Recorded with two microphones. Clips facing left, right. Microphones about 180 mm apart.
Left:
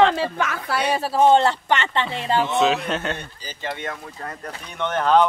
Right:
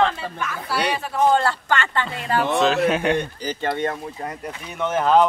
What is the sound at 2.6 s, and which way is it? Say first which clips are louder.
Speech: right 2 dB; centre (ahead or behind).